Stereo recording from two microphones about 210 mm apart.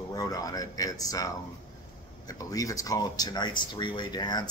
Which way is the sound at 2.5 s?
15° left (ahead or behind).